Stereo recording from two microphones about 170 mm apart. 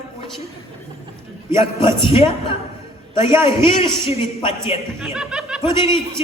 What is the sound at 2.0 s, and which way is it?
A man's voice, 30° left (ahead or behind).